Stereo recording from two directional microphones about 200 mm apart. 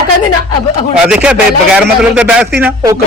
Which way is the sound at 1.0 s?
5° right (ahead or behind).